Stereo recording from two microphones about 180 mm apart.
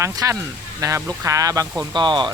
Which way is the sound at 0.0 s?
15° right (ahead or behind).